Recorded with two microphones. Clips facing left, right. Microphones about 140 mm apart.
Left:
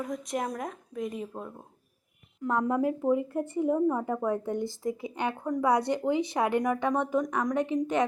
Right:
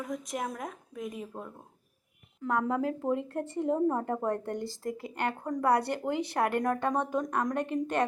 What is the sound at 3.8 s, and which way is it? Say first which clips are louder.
Speech: left 1 dB; 15° right (ahead or behind).